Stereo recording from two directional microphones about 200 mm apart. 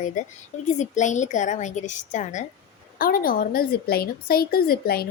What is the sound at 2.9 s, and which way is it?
A woman's voice, 45° left (ahead or behind).